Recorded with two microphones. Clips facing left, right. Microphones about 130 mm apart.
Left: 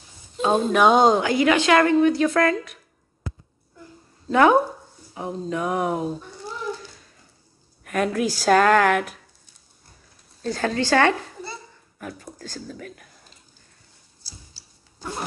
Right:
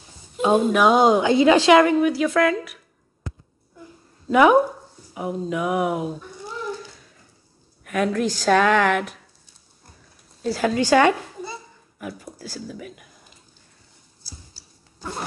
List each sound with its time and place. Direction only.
0.4 s a woman's voice: 10° right (ahead or behind)
1.2 s a woman's voice: 25° right (ahead or behind)
1.7 s a woman's voice: 10° right (ahead or behind)
4.3 s a woman's voice: 10° right (ahead or behind)
7.8 s a woman's voice: centre (ahead or behind)
10.4 s a child's voice: 10° right (ahead or behind)
15.0 s a sound: centre (ahead or behind)